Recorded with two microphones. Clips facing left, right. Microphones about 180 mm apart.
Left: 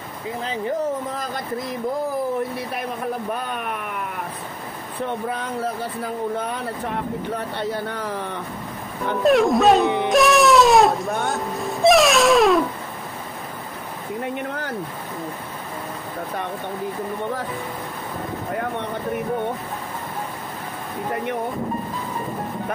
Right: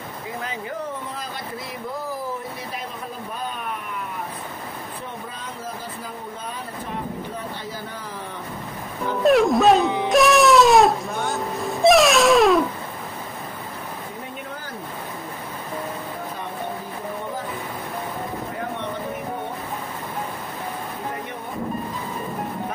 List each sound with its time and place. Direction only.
5.3 s speech: 65° left (ahead or behind)
9.2 s speech: centre (ahead or behind)
10.0 s wail: centre (ahead or behind)
11.1 s music: centre (ahead or behind)